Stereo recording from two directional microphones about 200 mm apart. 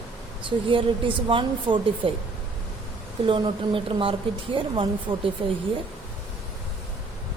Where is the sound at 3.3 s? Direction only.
25° right (ahead or behind).